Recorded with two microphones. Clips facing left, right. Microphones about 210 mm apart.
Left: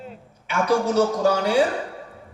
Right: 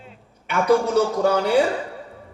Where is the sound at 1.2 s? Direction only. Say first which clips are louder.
Right 1 dB; 55° right (ahead or behind).